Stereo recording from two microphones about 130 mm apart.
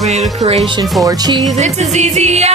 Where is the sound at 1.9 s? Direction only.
60° right (ahead or behind).